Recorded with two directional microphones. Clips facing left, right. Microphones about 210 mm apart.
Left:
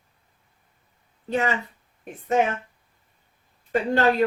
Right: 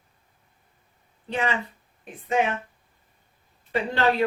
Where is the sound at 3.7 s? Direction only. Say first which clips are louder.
Left 3 dB; 45° left (ahead or behind).